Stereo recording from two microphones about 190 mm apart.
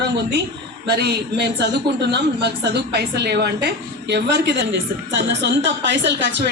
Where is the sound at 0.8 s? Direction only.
60° right (ahead or behind).